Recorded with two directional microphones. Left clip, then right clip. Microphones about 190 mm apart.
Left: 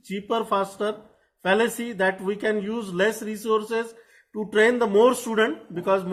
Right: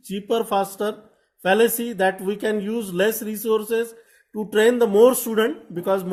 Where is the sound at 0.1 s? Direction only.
75° right (ahead or behind).